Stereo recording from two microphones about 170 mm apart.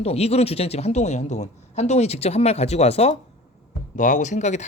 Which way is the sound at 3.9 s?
50° left (ahead or behind).